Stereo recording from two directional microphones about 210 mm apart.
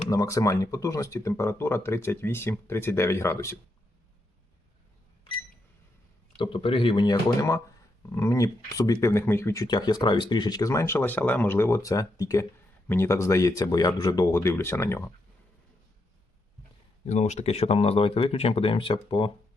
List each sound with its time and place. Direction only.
0.1 s speech: 15° left (ahead or behind)
6.3 s speech: 25° left (ahead or behind)
17.1 s speech: 35° left (ahead or behind)